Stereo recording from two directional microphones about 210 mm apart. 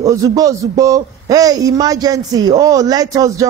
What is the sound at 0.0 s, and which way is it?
A man's voice, 15° right (ahead or behind).